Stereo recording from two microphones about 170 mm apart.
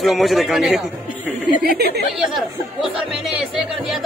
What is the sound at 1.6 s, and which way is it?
Speech, 65° right (ahead or behind).